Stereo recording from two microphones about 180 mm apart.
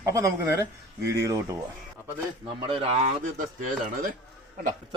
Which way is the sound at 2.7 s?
30° right (ahead or behind).